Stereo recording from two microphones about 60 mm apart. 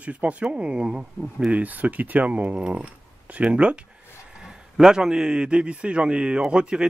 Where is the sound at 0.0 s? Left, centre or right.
Right.